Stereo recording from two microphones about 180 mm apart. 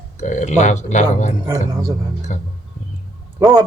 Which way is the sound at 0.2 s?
45° left (ahead or behind).